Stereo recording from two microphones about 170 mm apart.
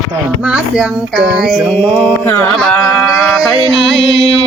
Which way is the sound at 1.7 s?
10° left (ahead or behind).